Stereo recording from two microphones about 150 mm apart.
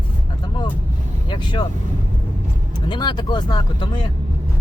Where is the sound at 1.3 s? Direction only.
30° left (ahead or behind).